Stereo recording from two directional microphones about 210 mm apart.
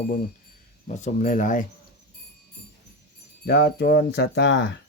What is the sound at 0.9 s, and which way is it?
Speech, 35° left (ahead or behind).